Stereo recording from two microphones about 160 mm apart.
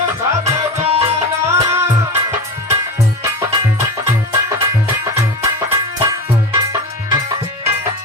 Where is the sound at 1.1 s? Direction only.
15° right (ahead or behind).